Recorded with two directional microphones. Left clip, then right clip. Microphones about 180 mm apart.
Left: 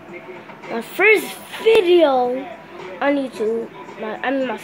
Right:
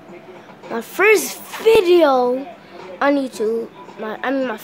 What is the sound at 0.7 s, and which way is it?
A child's voice, 20° right (ahead or behind).